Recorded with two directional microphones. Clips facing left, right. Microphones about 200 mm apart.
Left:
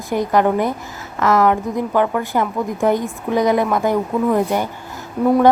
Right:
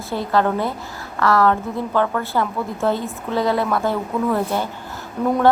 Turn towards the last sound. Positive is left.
turn(degrees=10)  # may be behind; listen again after turning